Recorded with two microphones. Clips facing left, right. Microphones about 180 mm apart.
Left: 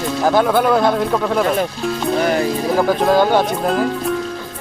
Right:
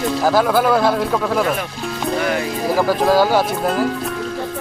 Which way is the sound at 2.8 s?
Centre (ahead or behind).